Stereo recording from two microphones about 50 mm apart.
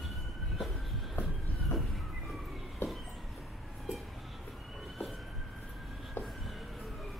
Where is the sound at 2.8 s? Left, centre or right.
Left.